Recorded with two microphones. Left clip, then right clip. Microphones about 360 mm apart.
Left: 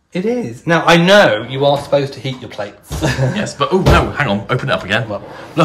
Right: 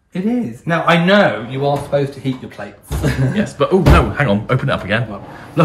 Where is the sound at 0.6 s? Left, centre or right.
Left.